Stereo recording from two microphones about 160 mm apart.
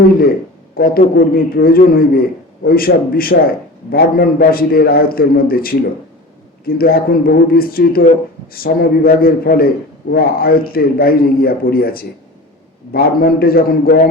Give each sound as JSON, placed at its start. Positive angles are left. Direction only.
{"t": 0.8, "sound": "a man's voice", "side_deg": 70}